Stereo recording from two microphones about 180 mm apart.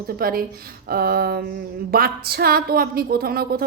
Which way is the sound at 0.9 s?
60° right (ahead or behind).